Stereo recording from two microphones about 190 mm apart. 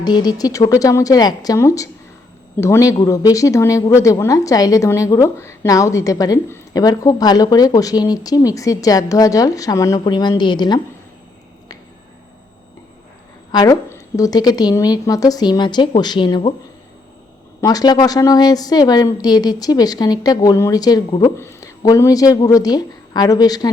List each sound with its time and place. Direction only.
0.0 s a woman's voice: 20° left (ahead or behind)
13.5 s a woman's voice: 20° left (ahead or behind)
17.6 s a woman's voice: 20° left (ahead or behind)